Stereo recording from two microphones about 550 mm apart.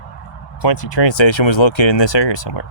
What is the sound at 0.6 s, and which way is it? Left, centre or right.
Speech, left.